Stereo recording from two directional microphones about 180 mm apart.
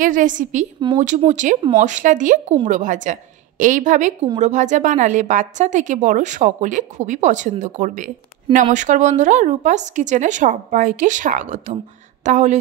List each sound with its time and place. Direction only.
0.0 s a woman's voice: 45° right (ahead or behind)